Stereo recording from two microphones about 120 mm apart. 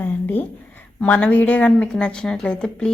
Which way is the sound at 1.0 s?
15° left (ahead or behind).